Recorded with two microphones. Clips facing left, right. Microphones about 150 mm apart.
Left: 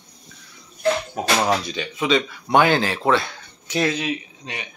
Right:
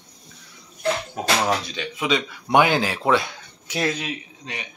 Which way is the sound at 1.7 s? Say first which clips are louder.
Left 2 dB; centre (ahead or behind).